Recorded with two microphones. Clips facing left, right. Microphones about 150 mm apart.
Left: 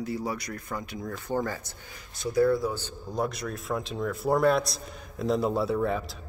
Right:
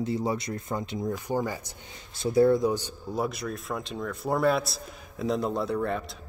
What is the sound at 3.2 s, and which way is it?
A man's voice, centre (ahead or behind).